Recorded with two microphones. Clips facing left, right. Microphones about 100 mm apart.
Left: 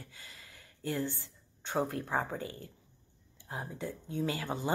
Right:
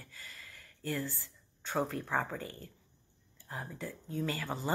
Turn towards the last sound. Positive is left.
turn(degrees=15)  # may be behind; listen again after turning